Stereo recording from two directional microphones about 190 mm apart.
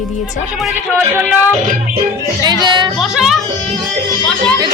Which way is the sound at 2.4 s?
20° right (ahead or behind).